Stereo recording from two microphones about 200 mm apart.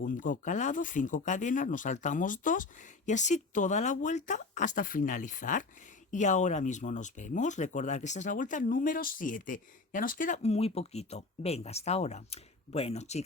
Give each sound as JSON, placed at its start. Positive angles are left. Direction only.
{"t": 0.0, "sound": "speech", "side_deg": 40}